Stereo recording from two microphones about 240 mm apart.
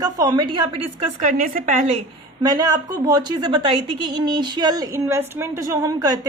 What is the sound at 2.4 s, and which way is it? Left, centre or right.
A woman's voice, centre.